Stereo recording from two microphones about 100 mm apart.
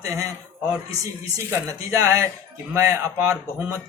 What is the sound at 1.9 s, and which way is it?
A man's voice, 30° right (ahead or behind).